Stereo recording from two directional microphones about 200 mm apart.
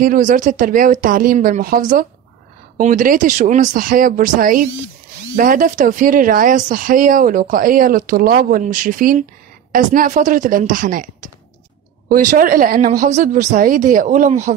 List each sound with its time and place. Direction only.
0.0 s speech: 40° right (ahead or behind)